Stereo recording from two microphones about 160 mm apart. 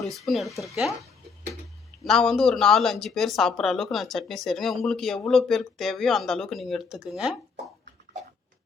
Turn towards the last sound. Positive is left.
turn(degrees=-5)  # may be behind; listen again after turning